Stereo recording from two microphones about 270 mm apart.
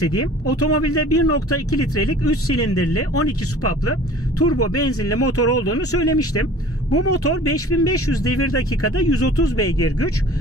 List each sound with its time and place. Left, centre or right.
0.0 s speech: left